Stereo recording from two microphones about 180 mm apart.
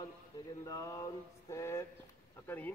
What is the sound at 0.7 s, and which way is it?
Mantra, 20° left (ahead or behind).